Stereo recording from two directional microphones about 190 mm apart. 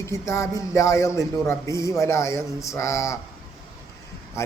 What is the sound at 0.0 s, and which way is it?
Speech, 15° left (ahead or behind).